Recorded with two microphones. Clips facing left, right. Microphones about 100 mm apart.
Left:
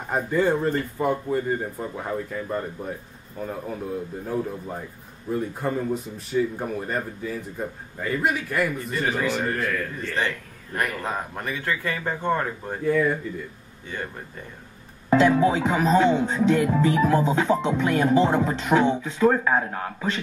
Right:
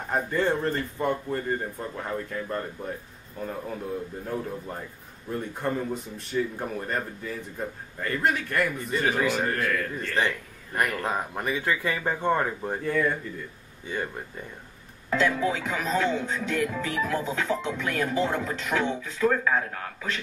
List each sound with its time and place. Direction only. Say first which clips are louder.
0.1 s a man's voice: left 3 dB; 5° left (ahead or behind)
9.1 s speech: left 1 dB; 15° right (ahead or behind)
9.4 s speech: left 1 dB; centre (ahead or behind)
10.7 s speech: even; 10° right (ahead or behind)
12.8 s speech: left 5 dB; 5° left (ahead or behind)
15.0 s music: left 7 dB; 30° left (ahead or behind)